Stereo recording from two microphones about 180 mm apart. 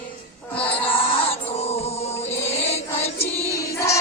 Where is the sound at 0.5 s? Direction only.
30° left (ahead or behind).